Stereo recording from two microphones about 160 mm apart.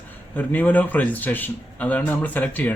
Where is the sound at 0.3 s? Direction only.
10° left (ahead or behind).